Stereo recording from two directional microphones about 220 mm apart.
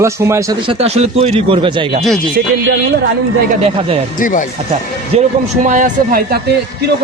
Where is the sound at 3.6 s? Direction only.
25° right (ahead or behind).